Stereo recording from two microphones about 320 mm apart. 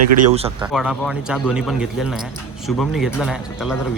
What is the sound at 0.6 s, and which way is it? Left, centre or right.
A man's voice, centre.